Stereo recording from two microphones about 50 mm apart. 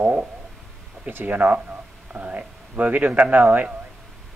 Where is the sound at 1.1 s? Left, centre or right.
Right.